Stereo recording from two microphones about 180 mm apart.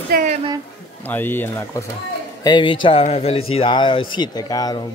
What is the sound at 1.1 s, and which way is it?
Speech, 10° left (ahead or behind).